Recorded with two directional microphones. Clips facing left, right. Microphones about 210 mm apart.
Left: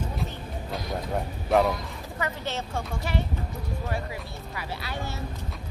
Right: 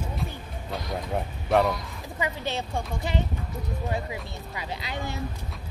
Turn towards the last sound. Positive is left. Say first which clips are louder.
# right 1 dB
turn(degrees=-15)  # may be behind; listen again after turning